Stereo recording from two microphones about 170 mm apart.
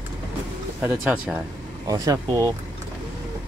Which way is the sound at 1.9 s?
20° right (ahead or behind).